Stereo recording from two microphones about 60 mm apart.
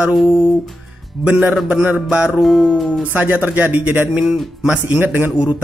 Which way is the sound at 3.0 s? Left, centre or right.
Right.